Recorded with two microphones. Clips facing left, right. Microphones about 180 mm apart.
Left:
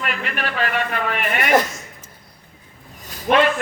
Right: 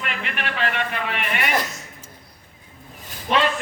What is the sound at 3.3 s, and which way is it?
Speech, 60° left (ahead or behind).